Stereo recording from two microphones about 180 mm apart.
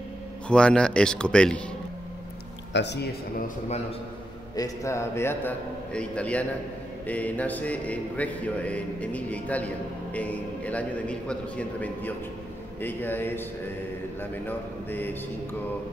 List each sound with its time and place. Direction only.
0.5 s speech: 5° left (ahead or behind)
2.7 s speech: 70° left (ahead or behind)
4.6 s a sound: 20° left (ahead or behind)